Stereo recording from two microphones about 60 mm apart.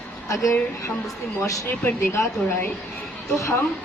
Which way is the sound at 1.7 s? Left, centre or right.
Left.